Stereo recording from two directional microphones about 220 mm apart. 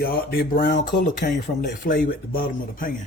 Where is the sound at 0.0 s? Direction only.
45° left (ahead or behind).